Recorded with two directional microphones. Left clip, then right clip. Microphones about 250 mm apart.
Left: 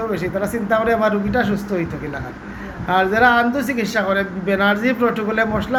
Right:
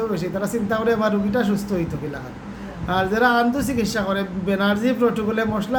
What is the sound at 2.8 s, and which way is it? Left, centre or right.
A man's voice, centre.